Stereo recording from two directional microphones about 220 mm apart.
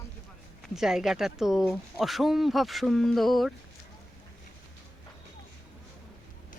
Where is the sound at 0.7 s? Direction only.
Centre (ahead or behind).